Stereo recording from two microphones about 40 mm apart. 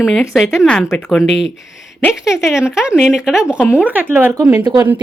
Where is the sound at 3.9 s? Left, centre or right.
Right.